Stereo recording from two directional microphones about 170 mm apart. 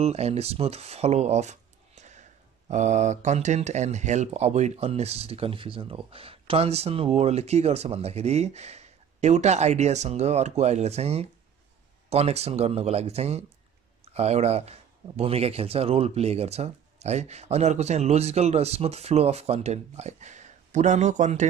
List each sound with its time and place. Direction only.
0.0 s speech: 40° right (ahead or behind)